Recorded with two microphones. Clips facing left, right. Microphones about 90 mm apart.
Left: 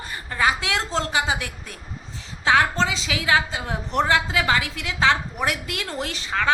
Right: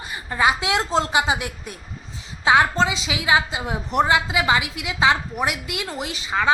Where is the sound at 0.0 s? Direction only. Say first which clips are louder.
Right 2 dB; 15° right (ahead or behind).